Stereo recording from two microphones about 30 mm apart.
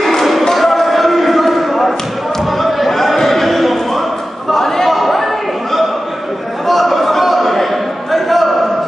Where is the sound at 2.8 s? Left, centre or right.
Centre.